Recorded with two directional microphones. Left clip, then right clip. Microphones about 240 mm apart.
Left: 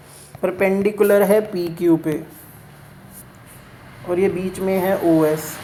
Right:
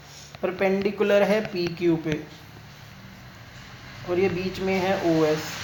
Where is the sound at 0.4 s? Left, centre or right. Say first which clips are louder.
Left 6 dB; left.